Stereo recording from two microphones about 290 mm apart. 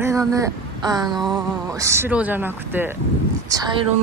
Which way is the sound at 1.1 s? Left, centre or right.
Centre.